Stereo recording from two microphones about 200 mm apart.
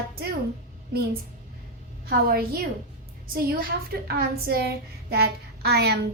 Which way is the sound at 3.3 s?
50° right (ahead or behind).